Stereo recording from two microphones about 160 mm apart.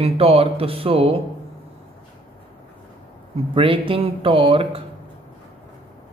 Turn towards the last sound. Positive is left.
turn(degrees=-35)  # may be behind; listen again after turning